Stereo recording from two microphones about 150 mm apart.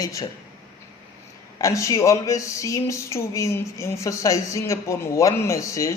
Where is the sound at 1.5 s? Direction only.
20° left (ahead or behind).